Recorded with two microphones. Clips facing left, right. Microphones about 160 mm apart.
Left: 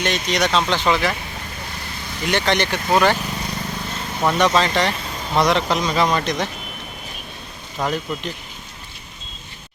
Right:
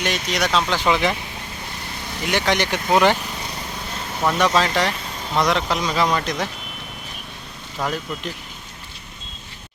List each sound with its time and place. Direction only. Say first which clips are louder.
0.0 s speech: left 2 dB; 5° right (ahead or behind)
2.2 s speech: left 1 dB; 10° right (ahead or behind)
4.4 s speech: left 1 dB; 5° right (ahead or behind)
7.8 s speech: left 2 dB; 15° left (ahead or behind)